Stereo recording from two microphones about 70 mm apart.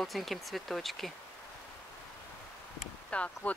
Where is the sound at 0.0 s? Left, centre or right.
Centre.